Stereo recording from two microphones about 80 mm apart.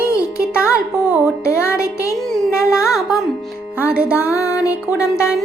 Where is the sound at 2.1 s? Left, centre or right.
Centre.